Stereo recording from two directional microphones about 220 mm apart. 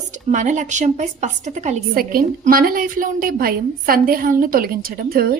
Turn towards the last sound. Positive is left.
turn(degrees=-40)  # may be behind; listen again after turning